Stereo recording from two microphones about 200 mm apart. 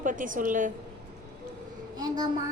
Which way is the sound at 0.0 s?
40° right (ahead or behind).